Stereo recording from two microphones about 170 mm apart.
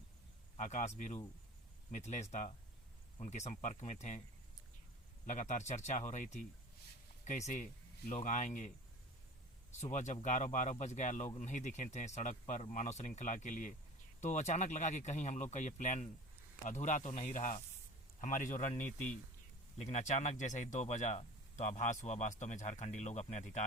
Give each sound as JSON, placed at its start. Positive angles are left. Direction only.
{"t": 0.5, "sound": "speech", "side_deg": 45}
{"t": 5.2, "sound": "speech", "side_deg": 45}
{"t": 9.8, "sound": "speech", "side_deg": 45}